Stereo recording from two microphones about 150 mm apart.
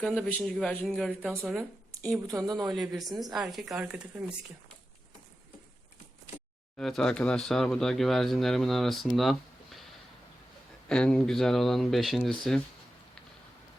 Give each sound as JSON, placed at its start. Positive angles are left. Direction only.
{"t": 0.0, "sound": "speech", "side_deg": 5}
{"t": 2.2, "sound": "speech", "side_deg": -25}
{"t": 2.7, "sound": "speech", "side_deg": 0}
{"t": 6.7, "sound": "speech", "side_deg": 5}
{"t": 10.8, "sound": "speech", "side_deg": 5}